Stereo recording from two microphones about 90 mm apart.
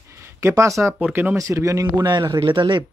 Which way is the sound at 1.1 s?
25° right (ahead or behind).